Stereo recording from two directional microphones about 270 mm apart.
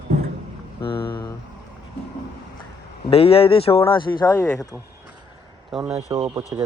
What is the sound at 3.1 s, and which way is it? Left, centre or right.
Speech, left.